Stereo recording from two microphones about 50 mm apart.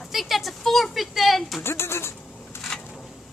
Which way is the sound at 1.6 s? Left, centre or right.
Left.